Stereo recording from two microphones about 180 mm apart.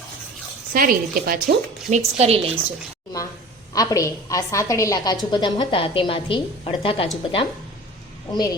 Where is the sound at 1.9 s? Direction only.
35° right (ahead or behind).